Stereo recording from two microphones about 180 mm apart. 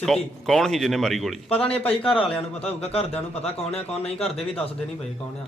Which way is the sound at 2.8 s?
35° left (ahead or behind).